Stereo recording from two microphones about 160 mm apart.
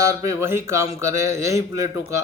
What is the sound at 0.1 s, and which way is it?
Speech, 15° right (ahead or behind).